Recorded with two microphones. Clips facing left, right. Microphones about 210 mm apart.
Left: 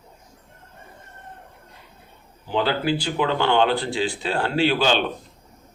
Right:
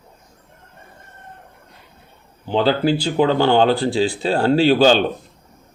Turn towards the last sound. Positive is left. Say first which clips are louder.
# right 7 dB
turn(degrees=-35)  # may be behind; listen again after turning